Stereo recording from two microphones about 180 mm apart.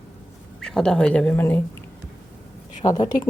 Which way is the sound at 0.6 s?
5° left (ahead or behind).